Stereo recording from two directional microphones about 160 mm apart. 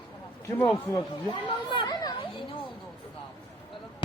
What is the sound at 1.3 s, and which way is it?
Chatter, 30° left (ahead or behind).